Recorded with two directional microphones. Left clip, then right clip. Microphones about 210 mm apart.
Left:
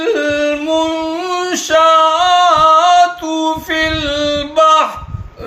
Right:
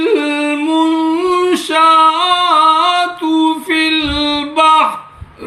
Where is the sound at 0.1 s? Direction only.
20° left (ahead or behind).